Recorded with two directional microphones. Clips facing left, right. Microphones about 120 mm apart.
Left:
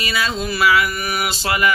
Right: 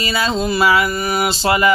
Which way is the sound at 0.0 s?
30° right (ahead or behind).